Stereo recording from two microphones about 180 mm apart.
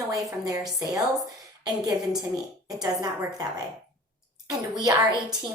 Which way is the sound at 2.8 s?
20° right (ahead or behind).